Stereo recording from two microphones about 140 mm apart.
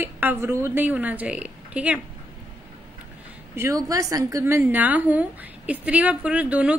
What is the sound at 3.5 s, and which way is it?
A woman's voice, 20° right (ahead or behind).